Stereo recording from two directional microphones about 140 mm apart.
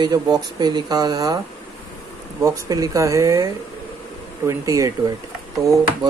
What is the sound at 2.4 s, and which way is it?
Speech, 25° right (ahead or behind).